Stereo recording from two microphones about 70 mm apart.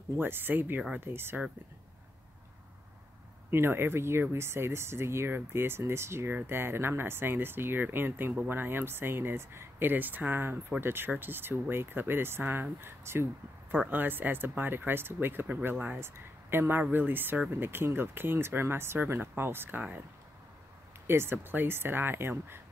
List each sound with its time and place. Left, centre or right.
0.2 s speech: right
3.4 s speech: right
21.1 s speech: right